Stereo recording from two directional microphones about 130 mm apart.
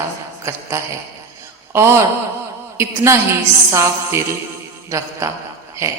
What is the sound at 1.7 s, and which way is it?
A woman's voice, 20° right (ahead or behind).